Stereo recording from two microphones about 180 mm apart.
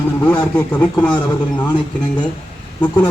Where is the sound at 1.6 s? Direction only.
25° left (ahead or behind).